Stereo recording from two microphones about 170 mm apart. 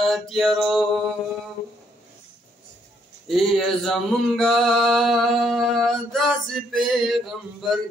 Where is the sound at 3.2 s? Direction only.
Centre (ahead or behind).